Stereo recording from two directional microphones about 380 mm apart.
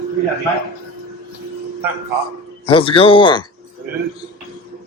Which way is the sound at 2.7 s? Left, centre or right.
Centre.